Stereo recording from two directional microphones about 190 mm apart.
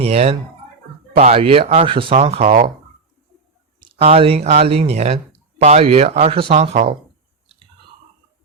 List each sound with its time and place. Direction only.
0.0 s speech: 35° right (ahead or behind)
3.8 s speech: 30° right (ahead or behind)